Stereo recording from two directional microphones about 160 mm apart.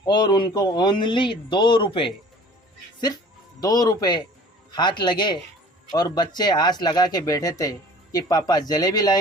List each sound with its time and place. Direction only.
0.0 s speech: 30° left (ahead or behind)
3.6 s speech: 25° left (ahead or behind)